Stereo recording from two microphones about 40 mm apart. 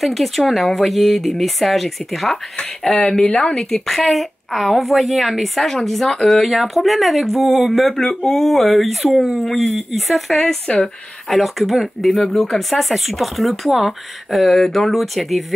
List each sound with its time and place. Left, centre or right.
0.0 s a woman's voice: centre
3.3 s speech: left
3.8 s a woman's voice: centre
10.7 s speech: left
11.2 s a woman's voice: centre
12.1 s a woman's voice: centre